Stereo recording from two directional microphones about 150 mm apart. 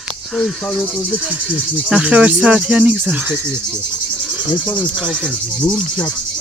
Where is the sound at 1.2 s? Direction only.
10° right (ahead or behind).